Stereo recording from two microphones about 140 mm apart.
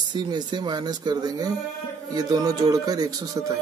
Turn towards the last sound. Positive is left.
turn(degrees=-25)  # may be behind; listen again after turning